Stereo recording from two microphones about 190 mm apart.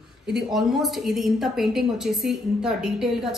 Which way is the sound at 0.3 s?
Centre (ahead or behind).